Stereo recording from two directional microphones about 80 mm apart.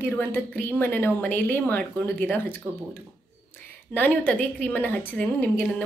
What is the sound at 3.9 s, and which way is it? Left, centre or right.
A woman's voice, left.